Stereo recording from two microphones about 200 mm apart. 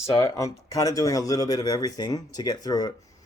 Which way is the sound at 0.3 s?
15° left (ahead or behind).